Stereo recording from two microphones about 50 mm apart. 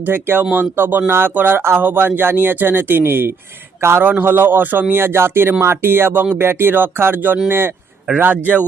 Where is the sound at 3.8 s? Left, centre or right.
Right.